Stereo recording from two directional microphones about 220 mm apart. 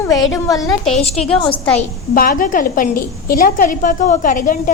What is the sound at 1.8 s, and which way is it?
A woman's voice, 40° left (ahead or behind).